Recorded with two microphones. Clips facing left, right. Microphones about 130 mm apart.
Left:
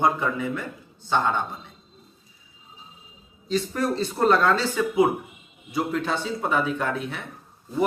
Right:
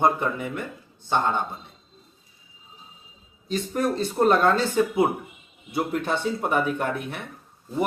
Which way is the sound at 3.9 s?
45° right (ahead or behind).